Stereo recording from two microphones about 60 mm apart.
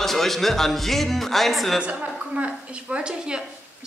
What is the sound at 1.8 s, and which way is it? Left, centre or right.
A woman's voice, centre.